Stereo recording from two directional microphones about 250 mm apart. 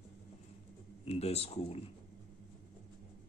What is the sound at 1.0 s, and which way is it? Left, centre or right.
Speech, left.